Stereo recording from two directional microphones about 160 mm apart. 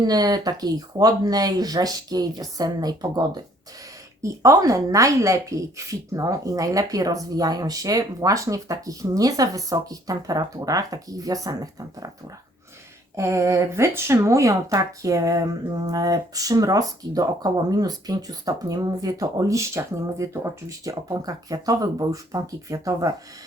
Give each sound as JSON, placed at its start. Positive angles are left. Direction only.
{"t": 0.0, "sound": "speech", "side_deg": -25}
{"t": 13.1, "sound": "speech", "side_deg": -20}